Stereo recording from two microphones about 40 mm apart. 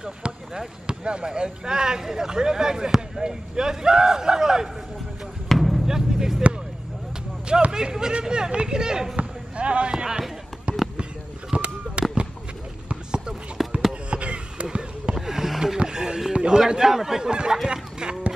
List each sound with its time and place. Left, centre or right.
0.0 s speech: centre
5.5 s basketball bounce: centre
5.9 s music: centre
7.7 s speech: centre
9.1 s basketball bounce: right
11.5 s a sound: right
13.6 s a sound: centre
14.1 s basketball bounce: right
15.1 s a sound: centre
15.8 s music: centre
16.3 s speech: centre